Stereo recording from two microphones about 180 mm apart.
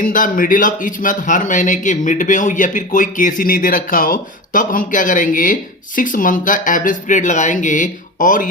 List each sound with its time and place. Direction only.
0.0 s speech: 50° left (ahead or behind)